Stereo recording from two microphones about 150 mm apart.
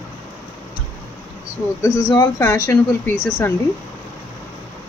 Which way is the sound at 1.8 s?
20° left (ahead or behind).